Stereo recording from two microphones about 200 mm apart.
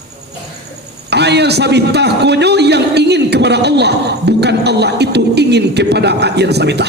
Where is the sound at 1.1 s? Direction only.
55° right (ahead or behind).